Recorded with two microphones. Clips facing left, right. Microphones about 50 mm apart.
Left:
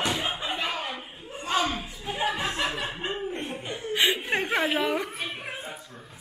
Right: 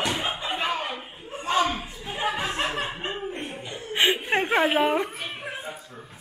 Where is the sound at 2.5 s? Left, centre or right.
Right.